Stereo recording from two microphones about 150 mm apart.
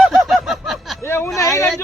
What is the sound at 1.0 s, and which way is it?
Speech, 20° left (ahead or behind).